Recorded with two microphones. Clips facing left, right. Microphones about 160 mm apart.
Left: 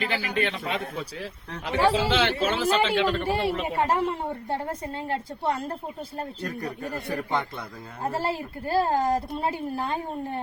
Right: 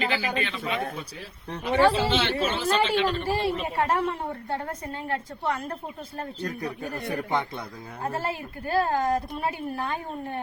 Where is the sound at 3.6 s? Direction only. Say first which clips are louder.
Left 1 dB; 25° left (ahead or behind).